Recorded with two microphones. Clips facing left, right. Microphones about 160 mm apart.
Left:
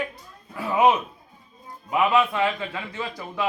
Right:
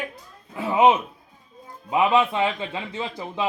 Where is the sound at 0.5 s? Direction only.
20° right (ahead or behind).